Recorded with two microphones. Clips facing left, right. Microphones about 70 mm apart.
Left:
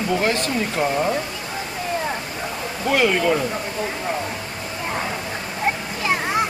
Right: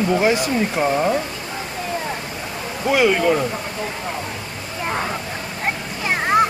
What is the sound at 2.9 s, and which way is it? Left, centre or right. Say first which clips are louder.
Speech: right 2 dB; centre.